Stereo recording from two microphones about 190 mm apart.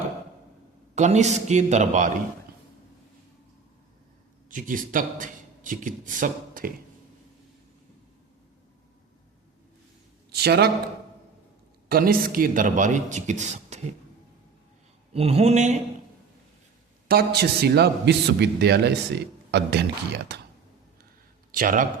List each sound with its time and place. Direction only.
0.9 s speech: 35° right (ahead or behind)
4.4 s speech: 45° right (ahead or behind)
10.3 s a man's voice: 60° right (ahead or behind)
11.9 s speech: 50° right (ahead or behind)
15.1 s speech: 30° right (ahead or behind)
17.1 s a man's voice: 55° right (ahead or behind)
21.5 s speech: 45° right (ahead or behind)